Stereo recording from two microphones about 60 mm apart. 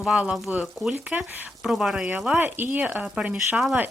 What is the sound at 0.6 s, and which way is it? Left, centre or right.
Speech, centre.